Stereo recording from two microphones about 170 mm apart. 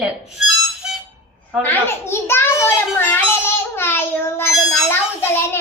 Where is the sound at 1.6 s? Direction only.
15° left (ahead or behind).